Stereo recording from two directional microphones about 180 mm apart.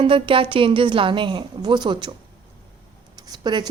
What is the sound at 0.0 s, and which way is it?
Speech, 30° right (ahead or behind).